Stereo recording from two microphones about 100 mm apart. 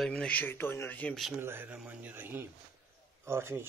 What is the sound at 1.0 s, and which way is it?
Speech, 5° left (ahead or behind).